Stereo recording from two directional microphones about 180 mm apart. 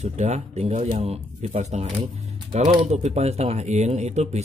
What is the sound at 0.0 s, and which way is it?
Speech, 40° right (ahead or behind).